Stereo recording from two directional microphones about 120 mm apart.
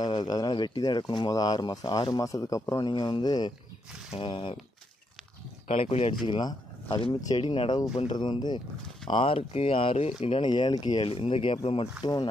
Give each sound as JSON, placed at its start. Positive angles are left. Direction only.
{"t": 0.0, "sound": "speech", "side_deg": 40}
{"t": 4.1, "sound": "speech", "side_deg": 45}
{"t": 5.7, "sound": "speech", "side_deg": 60}
{"t": 6.2, "sound": "speech", "side_deg": 40}
{"t": 11.1, "sound": "speech", "side_deg": 50}
{"t": 12.0, "sound": "speech", "side_deg": 40}